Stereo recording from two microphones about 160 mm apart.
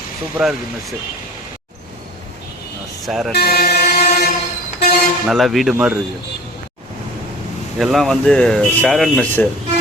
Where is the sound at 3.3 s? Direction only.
75° left (ahead or behind).